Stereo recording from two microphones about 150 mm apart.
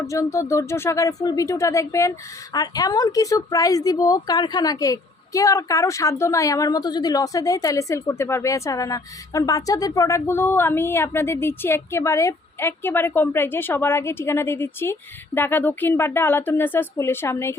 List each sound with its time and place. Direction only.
0.0 s speech: 20° left (ahead or behind)